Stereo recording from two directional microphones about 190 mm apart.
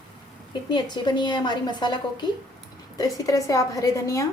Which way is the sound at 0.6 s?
25° left (ahead or behind).